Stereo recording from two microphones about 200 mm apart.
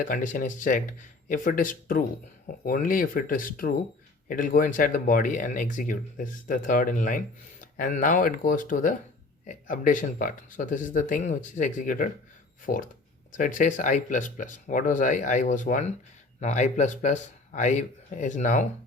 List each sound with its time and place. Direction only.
0.0 s speech: 40° left (ahead or behind)